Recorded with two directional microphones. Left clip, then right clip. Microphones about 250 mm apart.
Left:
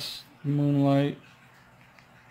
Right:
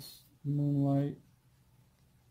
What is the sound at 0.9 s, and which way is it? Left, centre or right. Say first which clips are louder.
Speech: left 11 dB; centre.